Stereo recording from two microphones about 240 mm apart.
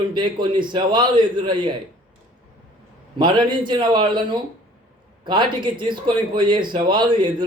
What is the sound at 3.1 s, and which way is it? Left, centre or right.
A man's voice, centre.